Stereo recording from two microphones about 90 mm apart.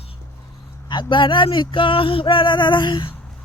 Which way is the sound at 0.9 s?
60° left (ahead or behind).